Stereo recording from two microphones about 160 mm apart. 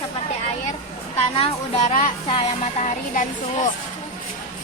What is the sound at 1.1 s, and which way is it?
Speech, 35° left (ahead or behind).